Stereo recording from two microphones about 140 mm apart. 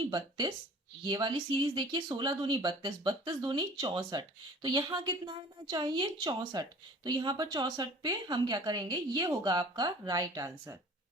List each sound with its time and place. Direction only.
0.1 s speech: 35° right (ahead or behind)